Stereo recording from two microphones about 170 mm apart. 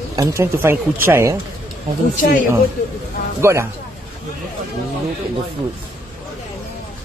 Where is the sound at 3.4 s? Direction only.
15° right (ahead or behind).